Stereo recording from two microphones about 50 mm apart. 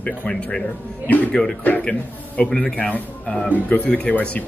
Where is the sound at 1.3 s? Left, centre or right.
Centre.